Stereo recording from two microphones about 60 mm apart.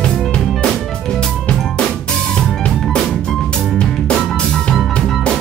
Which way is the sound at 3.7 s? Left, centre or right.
Centre.